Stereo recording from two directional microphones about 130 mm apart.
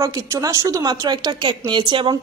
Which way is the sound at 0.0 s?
25° right (ahead or behind).